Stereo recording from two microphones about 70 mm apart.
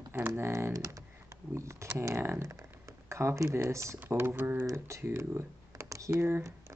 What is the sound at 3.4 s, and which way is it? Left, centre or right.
Speech, right.